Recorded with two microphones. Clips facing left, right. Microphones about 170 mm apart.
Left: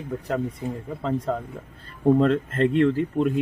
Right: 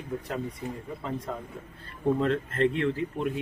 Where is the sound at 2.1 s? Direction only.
40° left (ahead or behind).